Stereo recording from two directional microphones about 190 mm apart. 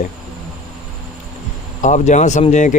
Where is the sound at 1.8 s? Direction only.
40° left (ahead or behind).